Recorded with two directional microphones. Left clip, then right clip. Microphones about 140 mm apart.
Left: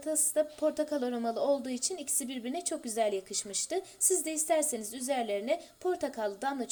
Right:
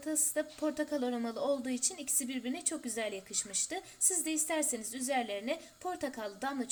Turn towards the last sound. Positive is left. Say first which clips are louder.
# left 5 dB
turn(degrees=20)  # may be behind; listen again after turning